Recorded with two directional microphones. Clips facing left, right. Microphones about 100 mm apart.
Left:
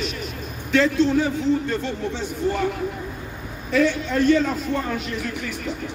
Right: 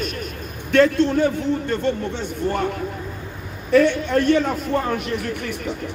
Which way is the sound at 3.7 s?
60° right (ahead or behind).